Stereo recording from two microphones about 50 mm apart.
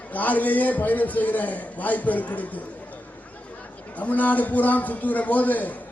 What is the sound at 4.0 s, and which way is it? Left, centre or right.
A man's voice, left.